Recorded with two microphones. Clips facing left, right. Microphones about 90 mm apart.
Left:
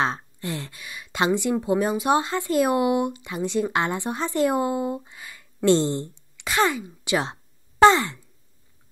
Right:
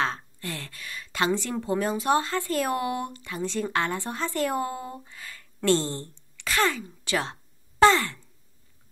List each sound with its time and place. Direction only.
0.0 s a woman's voice: 20° left (ahead or behind)
7.8 s sigh: 20° left (ahead or behind)